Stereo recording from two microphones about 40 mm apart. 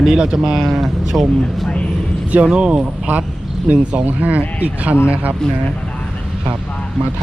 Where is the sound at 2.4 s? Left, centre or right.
Right.